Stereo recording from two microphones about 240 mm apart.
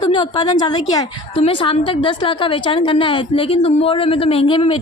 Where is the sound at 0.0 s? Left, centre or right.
Centre.